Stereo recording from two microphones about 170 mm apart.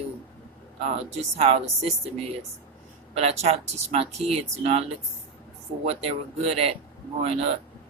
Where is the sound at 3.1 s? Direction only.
35° right (ahead or behind).